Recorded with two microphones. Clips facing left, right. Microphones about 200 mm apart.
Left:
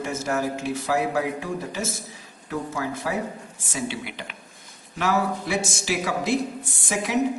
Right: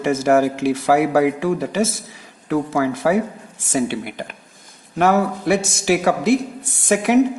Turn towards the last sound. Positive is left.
turn(degrees=-65)  # may be behind; listen again after turning